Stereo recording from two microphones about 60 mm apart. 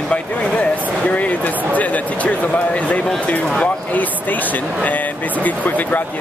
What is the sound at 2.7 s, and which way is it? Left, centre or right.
Speech, left.